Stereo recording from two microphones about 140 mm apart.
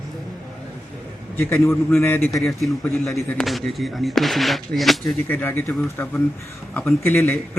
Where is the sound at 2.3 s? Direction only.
Centre (ahead or behind).